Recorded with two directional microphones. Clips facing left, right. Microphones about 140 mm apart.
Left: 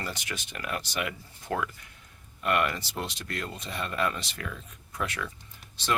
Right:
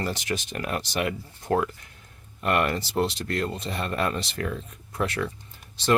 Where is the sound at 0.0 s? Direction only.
40° right (ahead or behind).